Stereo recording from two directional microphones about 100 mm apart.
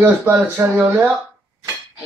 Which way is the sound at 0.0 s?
20° right (ahead or behind).